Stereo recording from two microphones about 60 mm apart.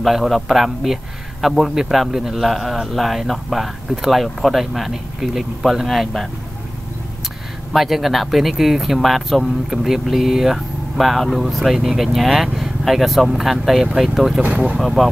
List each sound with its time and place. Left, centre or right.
0.0 s speech: centre
7.7 s speech: centre
14.4 s speech: right
14.8 s speech: centre